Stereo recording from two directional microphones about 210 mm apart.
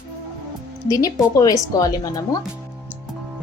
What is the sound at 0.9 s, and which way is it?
Speech, 15° left (ahead or behind).